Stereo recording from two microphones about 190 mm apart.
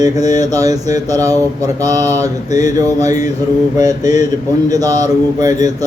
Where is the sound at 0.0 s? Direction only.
20° right (ahead or behind).